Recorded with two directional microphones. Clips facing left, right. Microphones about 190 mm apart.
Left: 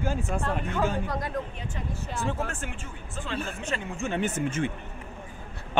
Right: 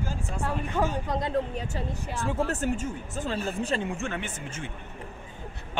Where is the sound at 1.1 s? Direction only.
25° right (ahead or behind).